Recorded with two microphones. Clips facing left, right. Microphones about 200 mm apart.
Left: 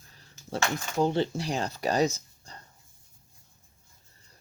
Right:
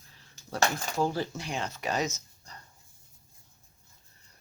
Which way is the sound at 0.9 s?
20° left (ahead or behind).